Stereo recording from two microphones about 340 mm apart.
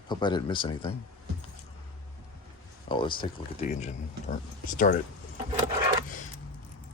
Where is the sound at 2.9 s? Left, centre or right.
Centre.